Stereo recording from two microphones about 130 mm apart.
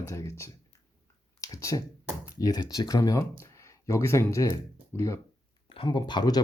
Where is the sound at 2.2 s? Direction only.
25° left (ahead or behind).